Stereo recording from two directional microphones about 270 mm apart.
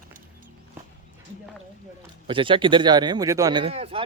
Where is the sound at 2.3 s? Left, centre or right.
Centre.